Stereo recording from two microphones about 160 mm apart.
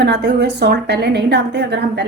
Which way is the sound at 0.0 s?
90° right.